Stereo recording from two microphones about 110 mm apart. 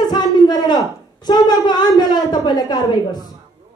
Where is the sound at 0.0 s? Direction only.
40° left (ahead or behind).